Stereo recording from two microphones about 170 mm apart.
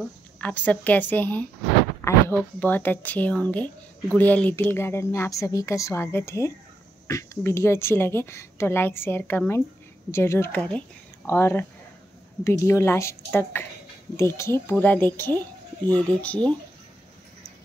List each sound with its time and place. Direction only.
0.0 s speech: 10° left (ahead or behind)